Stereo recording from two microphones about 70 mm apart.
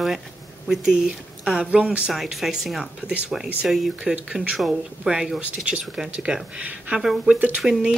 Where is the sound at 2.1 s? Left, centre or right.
Centre.